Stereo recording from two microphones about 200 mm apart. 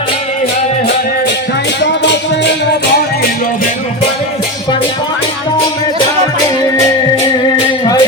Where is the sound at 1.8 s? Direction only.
60° left (ahead or behind).